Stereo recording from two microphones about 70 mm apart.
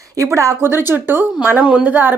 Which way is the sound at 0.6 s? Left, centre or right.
Right.